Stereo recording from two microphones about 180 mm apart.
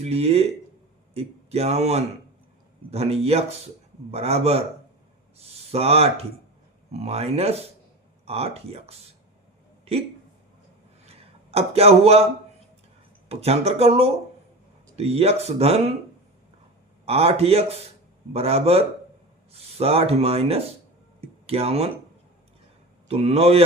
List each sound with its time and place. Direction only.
0.0 s speech: 35° right (ahead or behind)
11.0 s a sound: 35° right (ahead or behind)
13.2 s speech: 35° right (ahead or behind)
17.1 s speech: 35° right (ahead or behind)
21.2 s a sound: 35° right (ahead or behind)
23.0 s speech: 35° right (ahead or behind)